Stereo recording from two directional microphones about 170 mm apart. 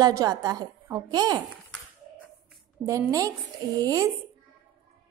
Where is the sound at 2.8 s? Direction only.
20° right (ahead or behind).